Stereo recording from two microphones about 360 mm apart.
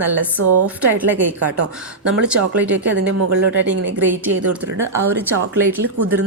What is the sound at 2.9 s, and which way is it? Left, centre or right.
Speech, right.